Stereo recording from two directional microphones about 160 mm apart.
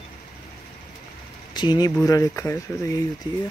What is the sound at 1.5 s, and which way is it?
Speech, 25° left (ahead or behind).